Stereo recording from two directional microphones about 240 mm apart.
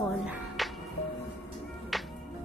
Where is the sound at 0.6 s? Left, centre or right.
Centre.